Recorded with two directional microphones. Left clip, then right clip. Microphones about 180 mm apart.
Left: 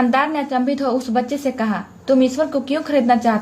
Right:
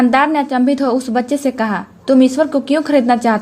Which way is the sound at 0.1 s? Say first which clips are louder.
Right 5 dB; 40° right (ahead or behind).